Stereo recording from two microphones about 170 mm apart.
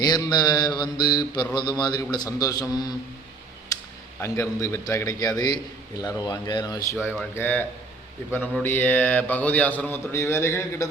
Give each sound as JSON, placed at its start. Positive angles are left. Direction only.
{"t": 0.0, "sound": "mantra", "side_deg": 25}
{"t": 4.2, "sound": "mantra", "side_deg": 15}
{"t": 7.2, "sound": "speech", "side_deg": 10}
{"t": 8.6, "sound": "speech", "side_deg": 10}